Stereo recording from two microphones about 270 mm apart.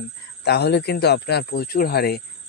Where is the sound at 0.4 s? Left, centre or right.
Left.